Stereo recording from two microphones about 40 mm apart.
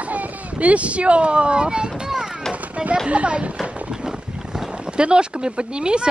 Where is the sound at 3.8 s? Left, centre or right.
Centre.